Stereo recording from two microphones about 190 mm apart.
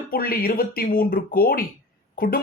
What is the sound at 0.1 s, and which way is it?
Speech, 50° left (ahead or behind).